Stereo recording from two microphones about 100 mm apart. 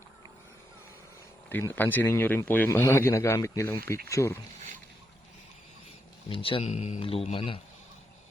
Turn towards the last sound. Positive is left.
turn(degrees=65)  # may be behind; listen again after turning